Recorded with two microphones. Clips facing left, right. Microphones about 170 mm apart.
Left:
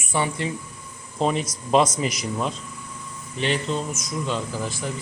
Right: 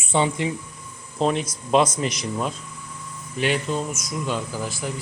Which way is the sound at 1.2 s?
Centre (ahead or behind).